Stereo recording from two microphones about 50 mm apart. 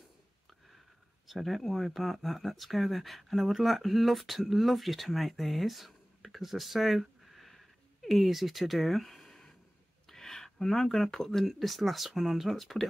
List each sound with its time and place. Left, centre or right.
1.2 s speech: centre